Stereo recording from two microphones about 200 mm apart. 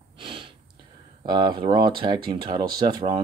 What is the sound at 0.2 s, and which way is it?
Snort, 25° right (ahead or behind).